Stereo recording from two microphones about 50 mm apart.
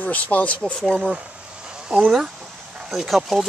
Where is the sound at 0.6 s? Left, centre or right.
Centre.